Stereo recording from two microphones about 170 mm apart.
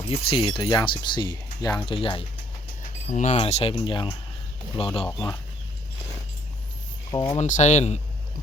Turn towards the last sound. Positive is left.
turn(degrees=40)  # may be behind; listen again after turning